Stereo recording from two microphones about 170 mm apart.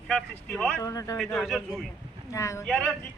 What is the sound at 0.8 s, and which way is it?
Speech, 20° left (ahead or behind).